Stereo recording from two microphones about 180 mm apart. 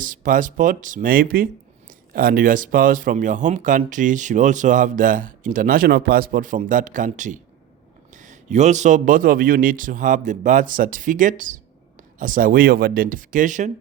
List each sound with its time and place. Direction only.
0.0 s speech: 50° right (ahead or behind)